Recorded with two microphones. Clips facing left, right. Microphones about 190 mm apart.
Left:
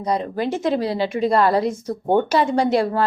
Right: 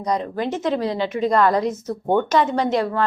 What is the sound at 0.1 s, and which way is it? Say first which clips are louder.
Speech: left 1 dB; 10° left (ahead or behind).